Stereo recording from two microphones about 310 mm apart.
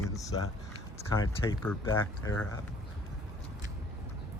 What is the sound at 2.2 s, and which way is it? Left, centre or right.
Speech, centre.